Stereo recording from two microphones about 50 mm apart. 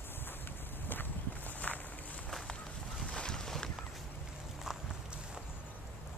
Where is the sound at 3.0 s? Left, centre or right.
Centre.